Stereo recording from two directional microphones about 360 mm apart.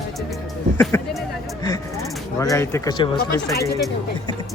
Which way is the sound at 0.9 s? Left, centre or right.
Centre.